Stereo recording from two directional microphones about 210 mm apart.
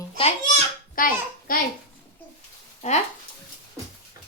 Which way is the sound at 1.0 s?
40° left (ahead or behind).